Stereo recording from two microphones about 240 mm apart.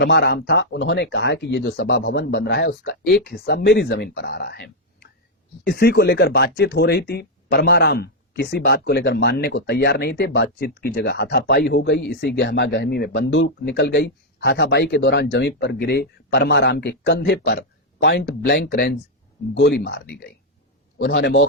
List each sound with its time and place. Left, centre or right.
0.0 s speech: left